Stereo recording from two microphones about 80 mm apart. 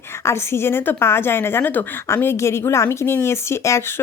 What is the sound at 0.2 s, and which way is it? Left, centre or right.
A woman's voice, left.